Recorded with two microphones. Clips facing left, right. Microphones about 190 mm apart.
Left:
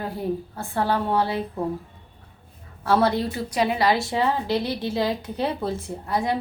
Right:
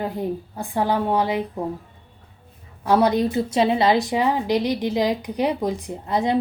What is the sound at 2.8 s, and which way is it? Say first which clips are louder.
A woman's voice: right 3 dB; 15° right (ahead or behind).